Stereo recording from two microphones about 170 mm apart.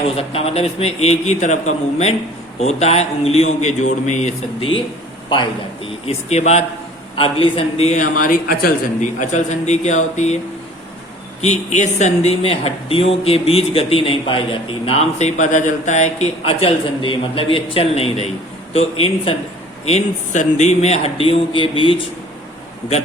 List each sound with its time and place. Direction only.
0.2 s speech: 35° left (ahead or behind)
6.1 s a man's voice: 40° left (ahead or behind)
11.3 s speech: 45° left (ahead or behind)